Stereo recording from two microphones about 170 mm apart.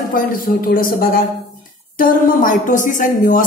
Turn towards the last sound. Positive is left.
turn(degrees=50)  # may be behind; listen again after turning